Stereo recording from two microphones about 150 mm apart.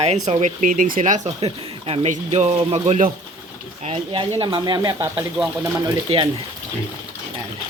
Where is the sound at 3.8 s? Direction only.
35° right (ahead or behind).